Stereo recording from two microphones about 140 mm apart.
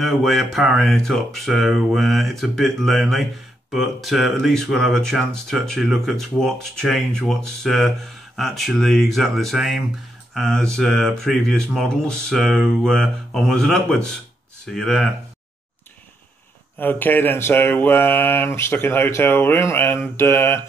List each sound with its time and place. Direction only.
0.0 s speech: centre (ahead or behind)
16.7 s speech: 15° left (ahead or behind)